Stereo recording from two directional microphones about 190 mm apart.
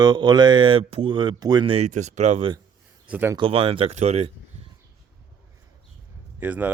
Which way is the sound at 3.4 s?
30° right (ahead or behind).